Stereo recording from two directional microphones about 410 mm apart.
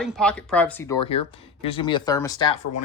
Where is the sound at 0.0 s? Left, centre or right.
Centre.